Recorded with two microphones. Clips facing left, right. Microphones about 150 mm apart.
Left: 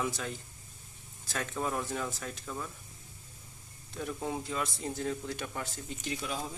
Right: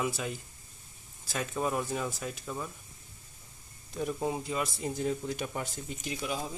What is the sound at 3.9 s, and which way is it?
Speech, 15° right (ahead or behind).